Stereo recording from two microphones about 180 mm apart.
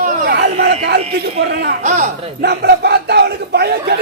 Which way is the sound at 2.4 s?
65° right (ahead or behind).